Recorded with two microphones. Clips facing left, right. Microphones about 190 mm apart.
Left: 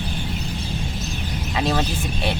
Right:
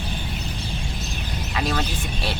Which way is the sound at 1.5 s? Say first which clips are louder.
Left 3 dB; 25° left (ahead or behind).